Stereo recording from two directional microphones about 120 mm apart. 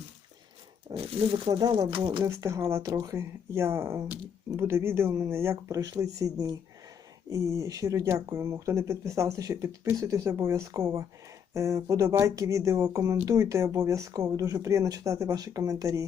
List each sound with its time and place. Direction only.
0.9 s speech: 55° right (ahead or behind)
1.5 s speech: 35° right (ahead or behind)
2.2 s speech: 25° right (ahead or behind)